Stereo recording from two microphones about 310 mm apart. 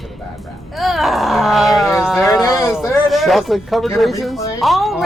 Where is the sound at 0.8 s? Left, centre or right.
Centre.